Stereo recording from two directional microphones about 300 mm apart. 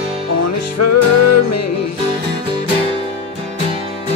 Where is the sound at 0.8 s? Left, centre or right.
Left.